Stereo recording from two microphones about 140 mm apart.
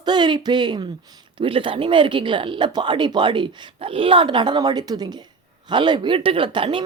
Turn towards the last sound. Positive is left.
turn(degrees=-35)  # may be behind; listen again after turning